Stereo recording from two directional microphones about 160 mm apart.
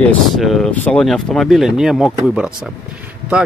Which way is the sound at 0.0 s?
Centre (ahead or behind).